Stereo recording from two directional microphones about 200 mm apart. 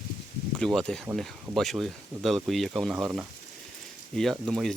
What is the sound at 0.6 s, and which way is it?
Speech, 5° left (ahead or behind).